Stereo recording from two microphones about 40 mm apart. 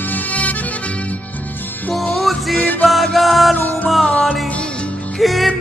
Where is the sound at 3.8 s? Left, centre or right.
Centre.